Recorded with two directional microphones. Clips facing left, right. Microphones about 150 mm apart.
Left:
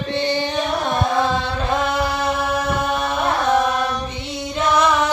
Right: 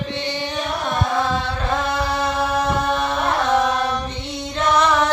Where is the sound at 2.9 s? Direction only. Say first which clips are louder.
Right 1 dB; 5° left (ahead or behind).